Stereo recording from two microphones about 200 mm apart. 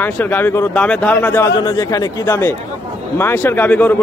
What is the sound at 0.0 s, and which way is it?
Speech, 10° left (ahead or behind).